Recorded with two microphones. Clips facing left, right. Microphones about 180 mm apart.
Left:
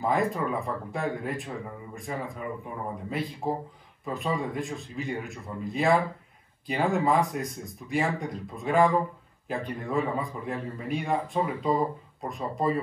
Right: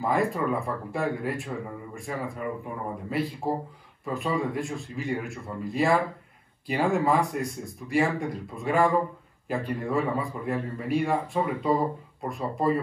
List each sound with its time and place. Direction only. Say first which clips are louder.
0.0 s a man's voice: right 1 dB; centre (ahead or behind)